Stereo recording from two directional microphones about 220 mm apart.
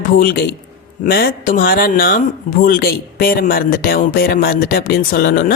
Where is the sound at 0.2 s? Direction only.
40° left (ahead or behind).